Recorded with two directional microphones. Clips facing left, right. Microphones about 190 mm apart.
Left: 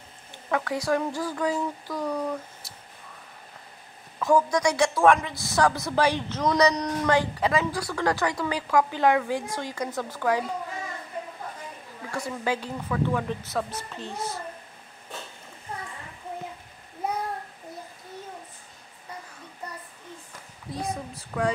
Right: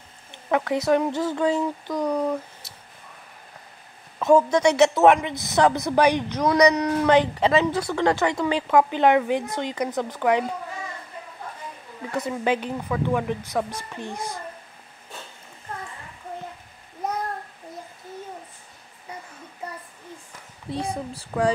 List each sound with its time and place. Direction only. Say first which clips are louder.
0.3 s a woman's voice: right 4 dB; 20° right (ahead or behind)
4.2 s a woman's voice: right 5 dB; 25° right (ahead or behind); by 6.9 s 10° right (ahead or behind)
7.1 s a woman's voice: right 4 dB; 20° right (ahead or behind)
12.1 s speech: right 5 dB; 20° right (ahead or behind)
20.7 s speech: right 3 dB; 30° right (ahead or behind)